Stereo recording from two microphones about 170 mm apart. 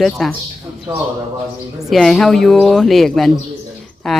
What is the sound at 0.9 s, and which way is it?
Speech, 25° right (ahead or behind).